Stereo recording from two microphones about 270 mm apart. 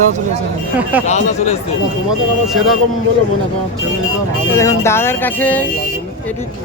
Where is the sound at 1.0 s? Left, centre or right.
Left.